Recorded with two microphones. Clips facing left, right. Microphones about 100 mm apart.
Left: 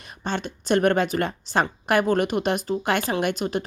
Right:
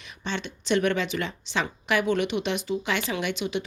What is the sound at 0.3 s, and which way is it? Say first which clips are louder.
Speech: left 3 dB; 45° left (ahead or behind).